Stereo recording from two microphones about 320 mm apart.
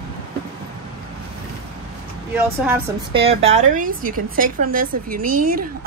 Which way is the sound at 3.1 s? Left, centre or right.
Centre.